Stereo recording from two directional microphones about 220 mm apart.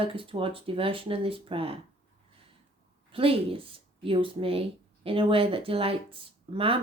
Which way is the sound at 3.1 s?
25° right (ahead or behind).